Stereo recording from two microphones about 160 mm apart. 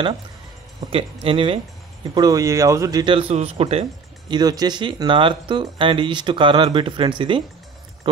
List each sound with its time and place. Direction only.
0.8 s speech: 35° right (ahead or behind)
2.1 s a man's voice: 20° right (ahead or behind); by 3.8 s 40° right (ahead or behind)
4.3 s speech: 25° right (ahead or behind)